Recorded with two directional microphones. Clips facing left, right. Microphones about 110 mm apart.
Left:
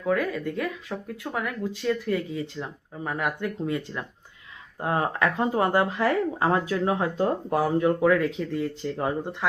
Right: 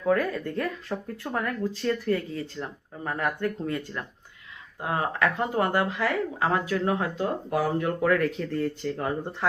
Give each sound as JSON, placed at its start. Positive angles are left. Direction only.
{"t": 0.0, "sound": "speech", "side_deg": 5}
{"t": 4.8, "sound": "speech", "side_deg": 30}